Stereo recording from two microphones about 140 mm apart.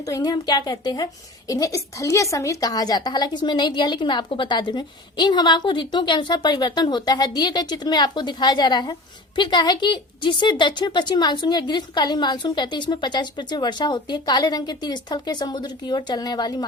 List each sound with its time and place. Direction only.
0.0 s a woman's voice: 25° left (ahead or behind)